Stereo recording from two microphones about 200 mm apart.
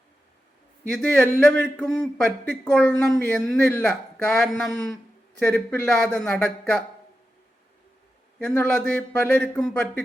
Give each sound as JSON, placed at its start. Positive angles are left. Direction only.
{"t": 0.9, "sound": "speech", "side_deg": 5}
{"t": 8.4, "sound": "speech", "side_deg": 5}